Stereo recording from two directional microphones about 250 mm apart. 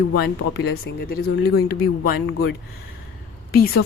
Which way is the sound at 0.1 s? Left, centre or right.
Left.